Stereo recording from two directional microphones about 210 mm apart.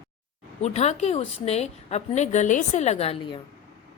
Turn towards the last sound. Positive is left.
turn(degrees=25)  # may be behind; listen again after turning